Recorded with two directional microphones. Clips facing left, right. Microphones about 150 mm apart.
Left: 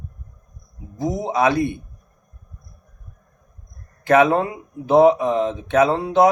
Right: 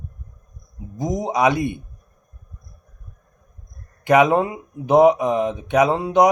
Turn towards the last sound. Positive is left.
turn(degrees=-15)  # may be behind; listen again after turning